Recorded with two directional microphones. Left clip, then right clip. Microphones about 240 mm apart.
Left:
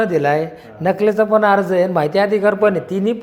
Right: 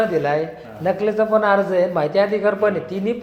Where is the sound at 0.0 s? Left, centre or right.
Left.